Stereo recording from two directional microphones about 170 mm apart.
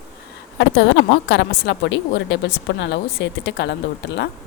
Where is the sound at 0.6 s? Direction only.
90° left.